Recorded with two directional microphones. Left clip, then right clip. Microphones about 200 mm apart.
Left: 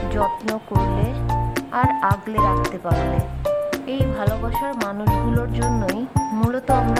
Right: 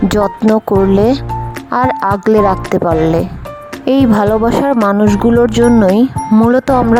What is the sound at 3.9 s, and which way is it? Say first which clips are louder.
Speech: right 14 dB; 55° right (ahead or behind).